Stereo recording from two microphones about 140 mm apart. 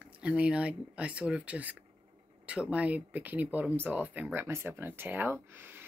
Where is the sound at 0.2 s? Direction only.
5° right (ahead or behind).